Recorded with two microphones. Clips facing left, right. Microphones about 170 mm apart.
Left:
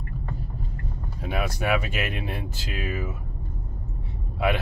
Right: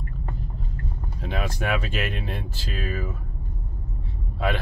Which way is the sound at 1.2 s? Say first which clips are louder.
Left 1 dB; 10° left (ahead or behind).